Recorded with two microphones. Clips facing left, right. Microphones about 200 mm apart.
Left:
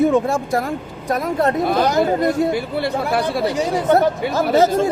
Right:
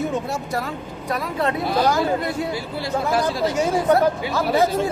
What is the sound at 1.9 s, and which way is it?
Speech, 20° left (ahead or behind).